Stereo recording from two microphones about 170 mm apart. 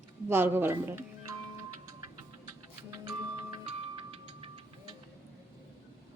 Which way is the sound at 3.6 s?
35° right (ahead or behind).